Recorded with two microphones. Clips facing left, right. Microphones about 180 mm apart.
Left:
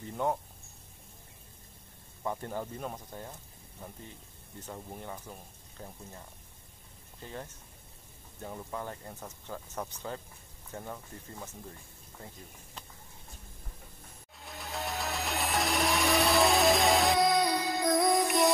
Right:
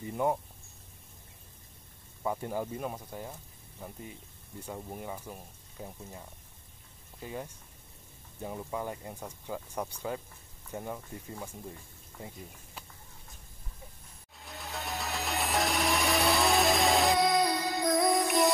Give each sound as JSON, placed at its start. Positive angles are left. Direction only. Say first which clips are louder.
{"t": 0.0, "sound": "speech", "louder": "right 2 dB", "side_deg": -10}
{"t": 2.2, "sound": "speech", "louder": "right 2 dB", "side_deg": -10}
{"t": 4.6, "sound": "speech", "louder": "right 3 dB", "side_deg": -10}
{"t": 14.4, "sound": "music", "louder": "left 2 dB", "side_deg": 0}